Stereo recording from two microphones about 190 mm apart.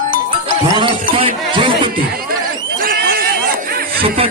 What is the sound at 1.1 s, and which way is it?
Music, 30° right (ahead or behind).